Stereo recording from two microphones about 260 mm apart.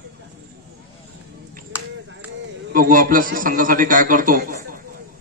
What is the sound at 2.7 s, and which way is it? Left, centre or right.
A man's voice, right.